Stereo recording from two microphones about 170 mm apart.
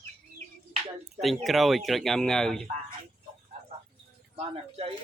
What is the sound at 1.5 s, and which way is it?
Speech, centre (ahead or behind).